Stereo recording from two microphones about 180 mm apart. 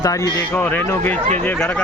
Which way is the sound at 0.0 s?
20° left (ahead or behind).